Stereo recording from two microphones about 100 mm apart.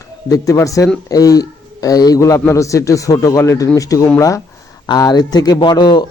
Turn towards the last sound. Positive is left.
turn(degrees=45)  # may be behind; listen again after turning